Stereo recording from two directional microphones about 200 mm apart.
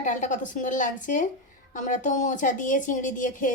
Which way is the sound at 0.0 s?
40° left (ahead or behind).